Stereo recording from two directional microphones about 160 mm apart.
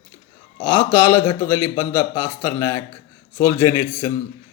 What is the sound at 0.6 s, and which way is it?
A man's voice, 15° left (ahead or behind).